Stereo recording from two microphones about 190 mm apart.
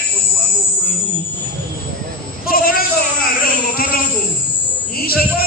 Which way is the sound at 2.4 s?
50° left (ahead or behind).